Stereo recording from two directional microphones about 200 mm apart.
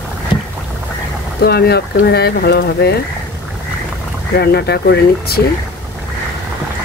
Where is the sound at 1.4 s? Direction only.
50° left (ahead or behind).